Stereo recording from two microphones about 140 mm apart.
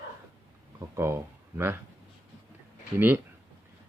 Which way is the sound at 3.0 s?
15° right (ahead or behind).